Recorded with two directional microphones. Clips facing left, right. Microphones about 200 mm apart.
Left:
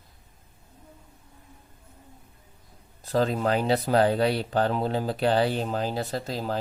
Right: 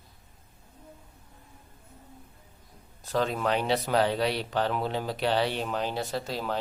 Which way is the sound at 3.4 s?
35° left (ahead or behind).